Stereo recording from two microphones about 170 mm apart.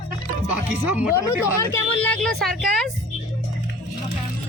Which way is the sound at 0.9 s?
10° right (ahead or behind).